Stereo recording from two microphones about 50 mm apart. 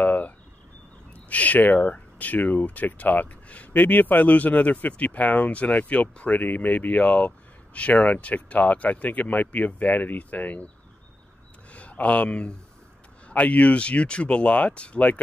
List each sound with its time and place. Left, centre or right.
0.0 s a sound: left
1.1 s speech: left
11.7 s speech: left